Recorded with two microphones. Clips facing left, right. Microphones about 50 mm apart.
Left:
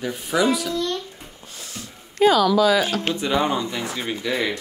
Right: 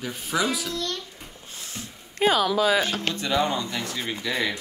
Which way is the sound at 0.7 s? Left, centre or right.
Left.